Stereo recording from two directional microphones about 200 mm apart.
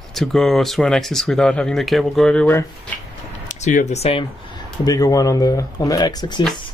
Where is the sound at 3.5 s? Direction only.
40° left (ahead or behind).